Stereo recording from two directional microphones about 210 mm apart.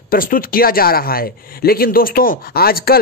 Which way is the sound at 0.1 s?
40° left (ahead or behind).